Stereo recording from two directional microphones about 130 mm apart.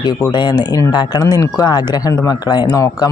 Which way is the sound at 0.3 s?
35° left (ahead or behind).